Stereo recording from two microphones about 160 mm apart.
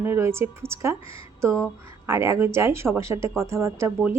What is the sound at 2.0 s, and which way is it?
A woman's voice, 15° right (ahead or behind).